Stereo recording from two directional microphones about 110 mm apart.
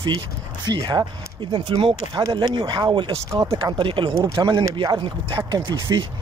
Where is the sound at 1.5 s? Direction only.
50° right (ahead or behind).